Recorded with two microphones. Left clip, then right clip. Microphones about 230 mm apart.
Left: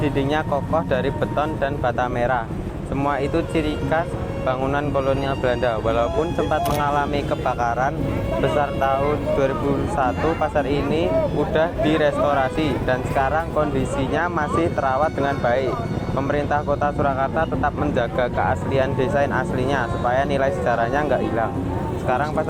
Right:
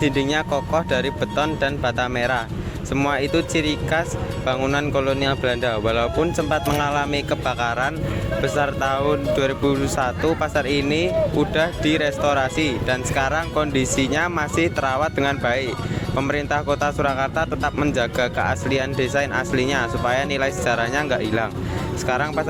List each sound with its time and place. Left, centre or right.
0.0 s speech: right
8.5 s speech: right
10.0 s speech: right